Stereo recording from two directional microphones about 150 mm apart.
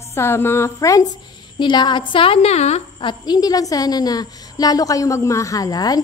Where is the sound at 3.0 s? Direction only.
30° left (ahead or behind).